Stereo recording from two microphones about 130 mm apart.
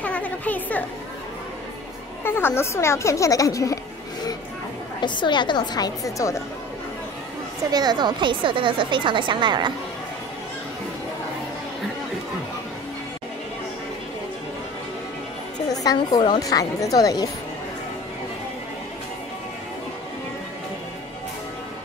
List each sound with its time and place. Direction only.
0.0 s a sound: 10° left (ahead or behind)
2.2 s speech: 20° left (ahead or behind)
5.0 s a woman's voice: 35° left (ahead or behind)
7.7 s a woman's voice: 35° right (ahead or behind)
15.7 s speech: 30° left (ahead or behind)